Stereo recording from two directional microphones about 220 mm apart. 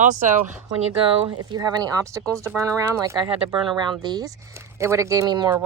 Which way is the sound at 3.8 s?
20° right (ahead or behind).